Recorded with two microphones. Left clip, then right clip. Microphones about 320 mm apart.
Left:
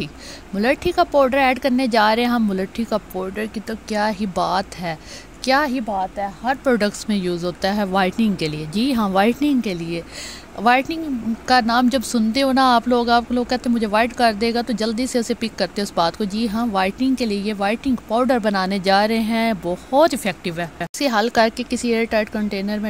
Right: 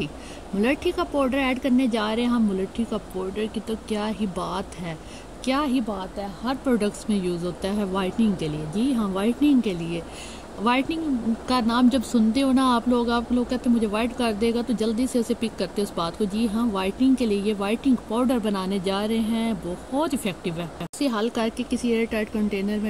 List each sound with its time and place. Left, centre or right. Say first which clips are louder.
0.6 s speech: left 6 dB; centre
3.3 s speech: left 2 dB; left
4.4 s a woman's voice: left 9 dB; centre